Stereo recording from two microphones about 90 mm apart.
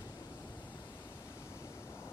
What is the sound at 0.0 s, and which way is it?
Waves, 45° left (ahead or behind).